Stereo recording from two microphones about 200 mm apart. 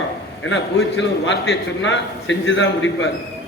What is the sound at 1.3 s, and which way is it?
A man's voice, 65° left (ahead or behind).